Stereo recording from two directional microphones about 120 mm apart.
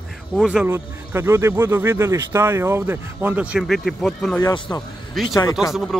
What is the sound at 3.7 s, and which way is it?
Speech, centre (ahead or behind).